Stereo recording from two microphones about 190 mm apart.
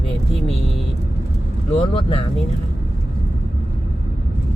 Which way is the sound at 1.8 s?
30° left (ahead or behind).